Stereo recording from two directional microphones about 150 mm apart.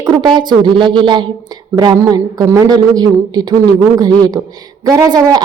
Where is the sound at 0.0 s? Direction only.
30° right (ahead or behind).